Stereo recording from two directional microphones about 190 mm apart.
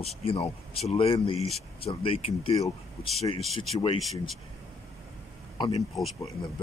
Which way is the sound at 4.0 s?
Centre (ahead or behind).